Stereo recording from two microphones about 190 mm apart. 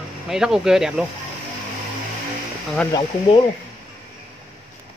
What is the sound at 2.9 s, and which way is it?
Speech, 20° left (ahead or behind).